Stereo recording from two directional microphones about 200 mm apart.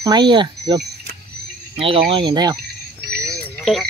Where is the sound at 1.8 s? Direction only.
25° right (ahead or behind).